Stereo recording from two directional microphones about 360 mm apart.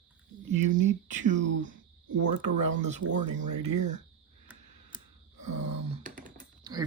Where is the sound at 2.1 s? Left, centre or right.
Right.